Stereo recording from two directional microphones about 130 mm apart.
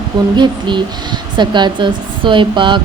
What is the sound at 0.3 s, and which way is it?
Speech, 35° right (ahead or behind).